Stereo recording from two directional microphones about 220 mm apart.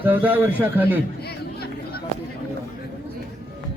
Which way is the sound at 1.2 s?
45° left (ahead or behind).